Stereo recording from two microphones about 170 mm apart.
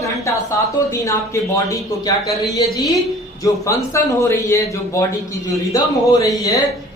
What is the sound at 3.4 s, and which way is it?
A man's voice, 20° left (ahead or behind).